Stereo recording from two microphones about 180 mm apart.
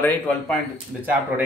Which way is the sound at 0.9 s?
5° right (ahead or behind).